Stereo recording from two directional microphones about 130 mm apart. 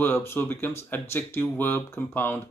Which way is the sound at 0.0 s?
20° left (ahead or behind).